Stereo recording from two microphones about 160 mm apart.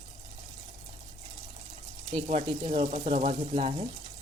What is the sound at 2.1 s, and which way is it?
Speech, 45° right (ahead or behind).